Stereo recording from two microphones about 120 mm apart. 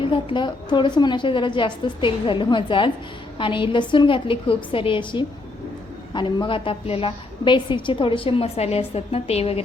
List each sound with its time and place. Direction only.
0.1 s a woman's voice: 45° left (ahead or behind)